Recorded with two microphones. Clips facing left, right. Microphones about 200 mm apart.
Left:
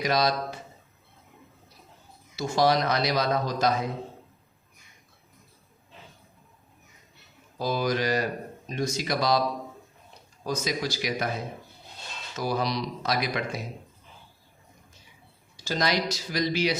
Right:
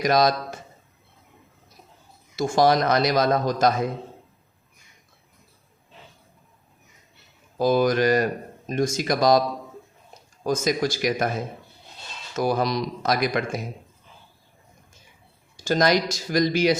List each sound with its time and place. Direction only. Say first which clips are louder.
0.0 s speech: right 5 dB; 45° right (ahead or behind)
2.3 s speech: right 4 dB; 50° right (ahead or behind)
7.6 s speech: right 7 dB; 50° right (ahead or behind)
10.4 s speech: right 6 dB; 50° right (ahead or behind)
15.5 s speech: right 7 dB; 50° right (ahead or behind)